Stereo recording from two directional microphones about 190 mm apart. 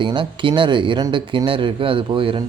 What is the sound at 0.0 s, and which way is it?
Speech, 25° right (ahead or behind).